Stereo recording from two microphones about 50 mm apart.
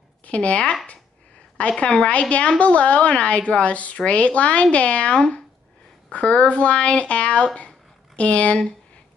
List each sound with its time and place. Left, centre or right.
0.2 s a woman's voice: left